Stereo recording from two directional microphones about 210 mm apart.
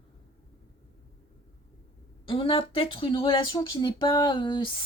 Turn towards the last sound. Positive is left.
turn(degrees=25)  # may be behind; listen again after turning